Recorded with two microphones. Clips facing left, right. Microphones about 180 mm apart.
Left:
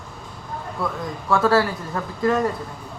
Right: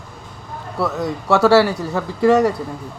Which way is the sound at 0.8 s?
80° right.